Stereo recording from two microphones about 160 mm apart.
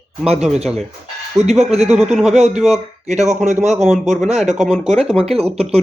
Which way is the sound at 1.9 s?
5° right (ahead or behind).